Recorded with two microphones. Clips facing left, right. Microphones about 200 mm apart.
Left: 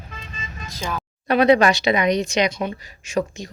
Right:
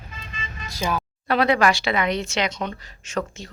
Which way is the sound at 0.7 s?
10° right (ahead or behind).